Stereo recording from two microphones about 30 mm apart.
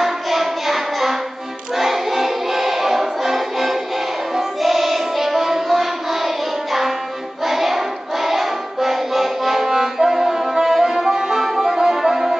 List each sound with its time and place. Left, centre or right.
0.0 s music: centre
7.4 s child singing: centre
11.1 s music: centre